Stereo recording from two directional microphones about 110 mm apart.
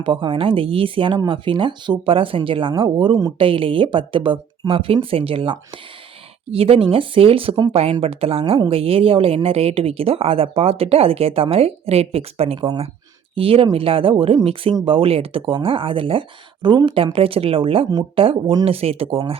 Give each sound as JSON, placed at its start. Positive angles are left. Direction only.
{"t": 0.0, "sound": "speech", "side_deg": -50}
{"t": 3.3, "sound": "speech", "side_deg": -55}